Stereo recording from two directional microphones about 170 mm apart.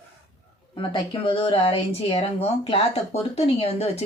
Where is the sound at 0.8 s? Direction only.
30° left (ahead or behind).